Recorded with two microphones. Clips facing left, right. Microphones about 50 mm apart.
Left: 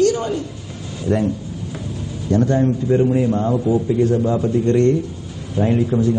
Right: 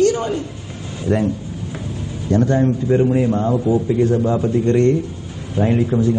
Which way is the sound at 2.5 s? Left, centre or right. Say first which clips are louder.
Right 1 dB; right.